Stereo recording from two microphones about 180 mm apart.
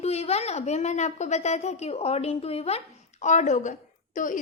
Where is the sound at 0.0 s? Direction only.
35° left (ahead or behind).